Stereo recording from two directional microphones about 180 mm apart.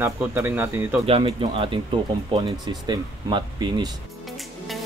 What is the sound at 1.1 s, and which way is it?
Speech, 30° right (ahead or behind).